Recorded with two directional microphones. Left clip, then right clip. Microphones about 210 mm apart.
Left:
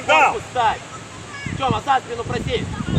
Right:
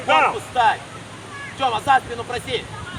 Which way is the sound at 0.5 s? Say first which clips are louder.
Right 2 dB; 50° right (ahead or behind).